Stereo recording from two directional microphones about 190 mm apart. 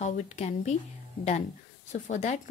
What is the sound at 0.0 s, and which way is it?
Speech, 40° left (ahead or behind).